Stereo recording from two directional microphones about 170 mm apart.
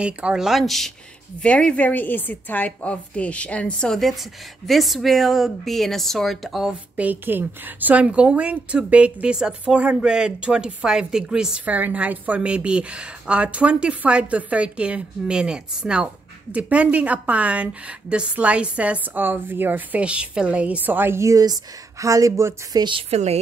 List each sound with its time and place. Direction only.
0.0 s a woman's voice: 5° right (ahead or behind); by 23.4 s 40° right (ahead or behind)